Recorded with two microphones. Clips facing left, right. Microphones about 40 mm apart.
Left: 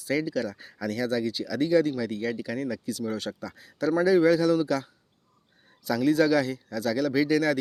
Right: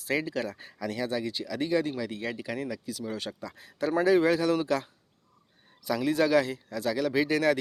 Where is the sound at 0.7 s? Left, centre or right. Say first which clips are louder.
Left 3 dB; centre.